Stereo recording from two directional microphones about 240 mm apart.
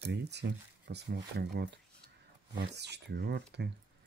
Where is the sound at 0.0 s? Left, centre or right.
Right.